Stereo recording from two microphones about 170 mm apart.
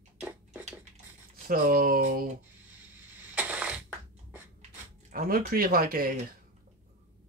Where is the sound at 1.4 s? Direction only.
55° right (ahead or behind).